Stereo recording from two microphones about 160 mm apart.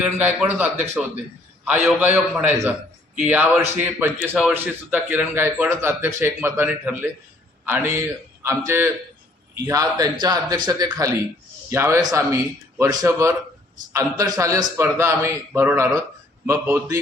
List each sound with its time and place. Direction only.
0.0 s a man's voice: 10° right (ahead or behind)